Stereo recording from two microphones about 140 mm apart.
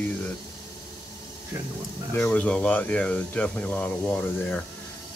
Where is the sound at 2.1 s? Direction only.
10° left (ahead or behind).